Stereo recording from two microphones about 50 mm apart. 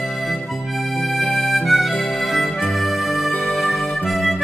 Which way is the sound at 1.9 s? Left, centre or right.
Left.